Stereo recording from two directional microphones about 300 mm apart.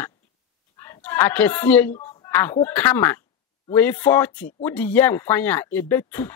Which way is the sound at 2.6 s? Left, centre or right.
Centre.